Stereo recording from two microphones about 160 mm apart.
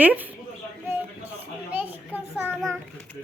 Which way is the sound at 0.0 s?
10° right (ahead or behind).